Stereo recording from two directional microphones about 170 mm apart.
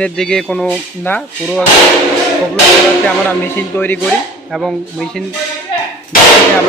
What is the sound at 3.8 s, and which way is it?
Speech, 10° left (ahead or behind).